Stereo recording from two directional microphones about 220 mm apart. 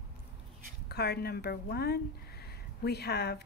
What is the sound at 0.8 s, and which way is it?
Speech, 45° left (ahead or behind).